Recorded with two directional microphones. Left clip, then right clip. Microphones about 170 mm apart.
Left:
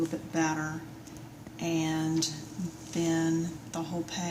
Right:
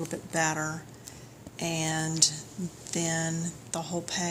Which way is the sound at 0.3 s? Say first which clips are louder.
Right 2 dB; 55° right (ahead or behind).